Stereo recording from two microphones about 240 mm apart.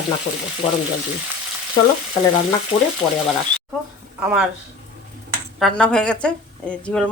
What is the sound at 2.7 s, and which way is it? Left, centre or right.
Speech, left.